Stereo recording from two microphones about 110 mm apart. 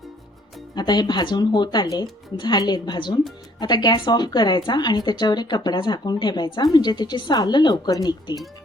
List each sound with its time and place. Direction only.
0.8 s speech: 40° left (ahead or behind)